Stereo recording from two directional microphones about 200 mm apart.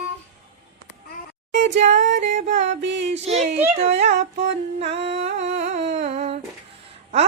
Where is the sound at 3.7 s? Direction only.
35° right (ahead or behind).